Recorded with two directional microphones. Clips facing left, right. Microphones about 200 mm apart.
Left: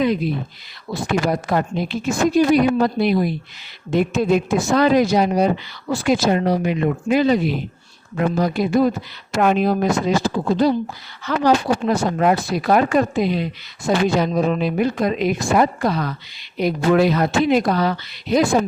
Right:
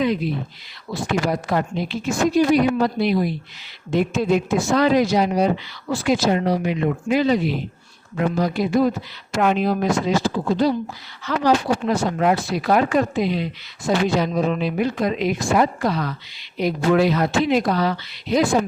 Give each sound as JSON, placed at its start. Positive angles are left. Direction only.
{"t": 1.0, "sound": "speech", "side_deg": 45}